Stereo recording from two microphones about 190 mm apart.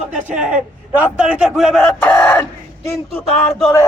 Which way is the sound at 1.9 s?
10° left (ahead or behind).